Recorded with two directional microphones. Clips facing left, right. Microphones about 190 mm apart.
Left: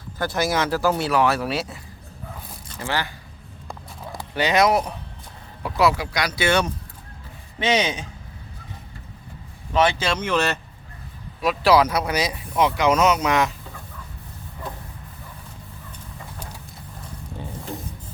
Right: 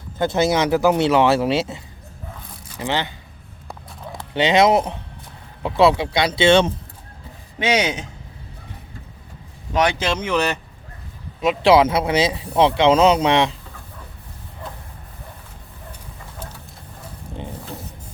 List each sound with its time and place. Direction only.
0.2 s speech: 25° right (ahead or behind)
3.7 s vehicle: centre (ahead or behind)
4.4 s speech: 25° right (ahead or behind)
7.6 s speech: 10° right (ahead or behind)
9.7 s speech: 15° right (ahead or behind)